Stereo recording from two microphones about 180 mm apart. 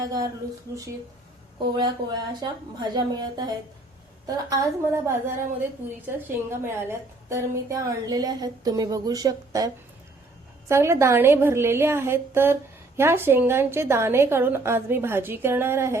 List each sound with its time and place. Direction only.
0.0 s speech: 20° right (ahead or behind)
1.7 s a woman's voice: 25° right (ahead or behind)
10.7 s a woman's voice: 15° right (ahead or behind)